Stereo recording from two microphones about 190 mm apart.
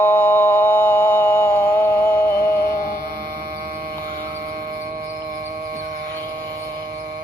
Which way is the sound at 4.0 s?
50° right (ahead or behind).